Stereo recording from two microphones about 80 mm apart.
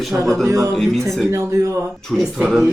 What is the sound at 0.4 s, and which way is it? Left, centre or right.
Speech, right.